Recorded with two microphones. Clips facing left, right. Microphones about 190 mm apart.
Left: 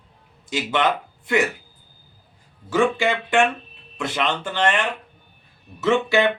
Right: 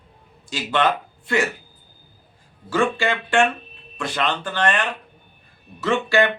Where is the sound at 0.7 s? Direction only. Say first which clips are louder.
Right 2 dB; 15° left (ahead or behind).